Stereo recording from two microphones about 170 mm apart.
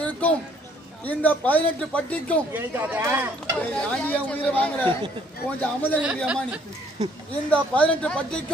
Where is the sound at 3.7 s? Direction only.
5° left (ahead or behind).